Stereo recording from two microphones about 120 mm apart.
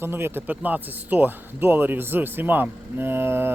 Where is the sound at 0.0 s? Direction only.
20° right (ahead or behind).